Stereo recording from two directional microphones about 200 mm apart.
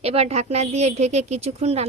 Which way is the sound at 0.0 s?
30° right (ahead or behind).